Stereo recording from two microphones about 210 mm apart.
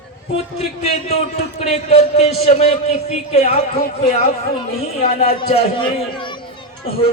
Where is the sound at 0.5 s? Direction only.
30° left (ahead or behind).